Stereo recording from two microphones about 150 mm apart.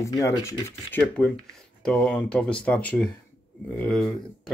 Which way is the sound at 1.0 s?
5° left (ahead or behind).